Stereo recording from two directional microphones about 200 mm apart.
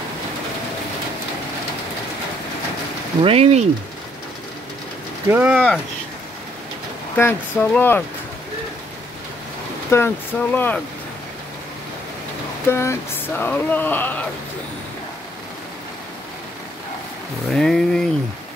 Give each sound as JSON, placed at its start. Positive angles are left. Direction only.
{"t": 3.2, "sound": "speech", "side_deg": -30}
{"t": 5.3, "sound": "speech", "side_deg": -10}
{"t": 7.2, "sound": "speech", "side_deg": 10}
{"t": 9.8, "sound": "speech", "side_deg": 10}
{"t": 12.6, "sound": "speech", "side_deg": 10}
{"t": 17.5, "sound": "speech", "side_deg": 0}